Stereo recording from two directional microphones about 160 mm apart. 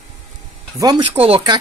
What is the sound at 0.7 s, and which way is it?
Speech, 25° right (ahead or behind).